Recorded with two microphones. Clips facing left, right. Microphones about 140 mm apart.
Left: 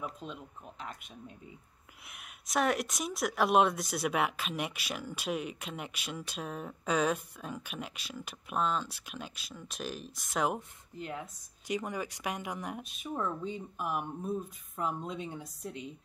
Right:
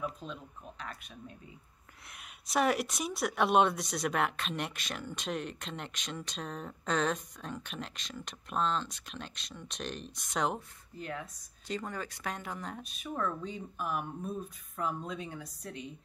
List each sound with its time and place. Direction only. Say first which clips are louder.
0.2 s speech: even; 15° left (ahead or behind)
2.0 s speech: even; centre (ahead or behind)
11.0 s speech: even; 20° left (ahead or behind)